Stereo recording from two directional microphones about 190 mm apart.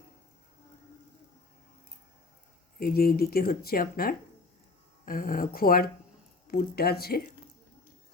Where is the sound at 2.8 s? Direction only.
50° left (ahead or behind).